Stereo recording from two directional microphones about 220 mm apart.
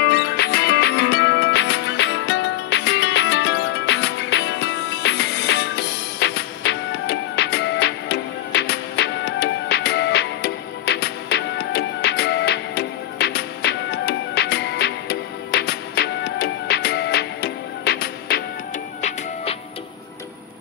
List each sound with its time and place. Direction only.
0.0 s music: 50° left (ahead or behind)
18.9 s music: 30° left (ahead or behind)